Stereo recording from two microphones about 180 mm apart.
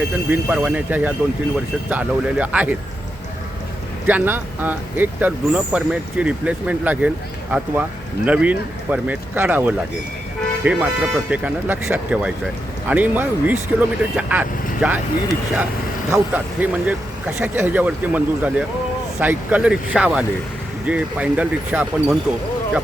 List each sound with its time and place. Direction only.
0.3 s speech: 10° right (ahead or behind)
4.0 s speech: 10° right (ahead or behind)
16.1 s speech: 10° right (ahead or behind)